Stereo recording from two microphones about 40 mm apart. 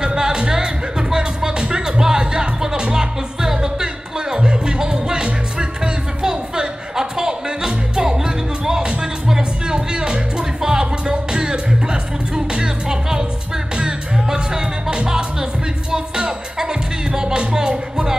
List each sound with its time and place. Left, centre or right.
0.0 s music: centre